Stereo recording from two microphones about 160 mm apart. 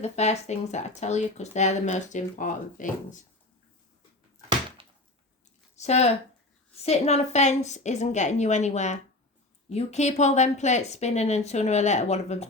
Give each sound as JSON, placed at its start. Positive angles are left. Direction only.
{"t": 0.0, "sound": "speech", "side_deg": 45}
{"t": 5.7, "sound": "speech", "side_deg": 45}